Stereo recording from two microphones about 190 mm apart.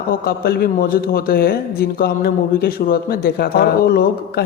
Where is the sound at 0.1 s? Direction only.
50° left (ahead or behind).